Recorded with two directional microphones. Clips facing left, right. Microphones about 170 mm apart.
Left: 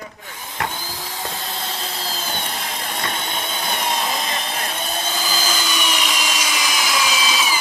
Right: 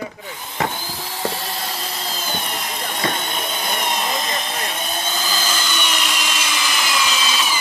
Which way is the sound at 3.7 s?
30° left (ahead or behind).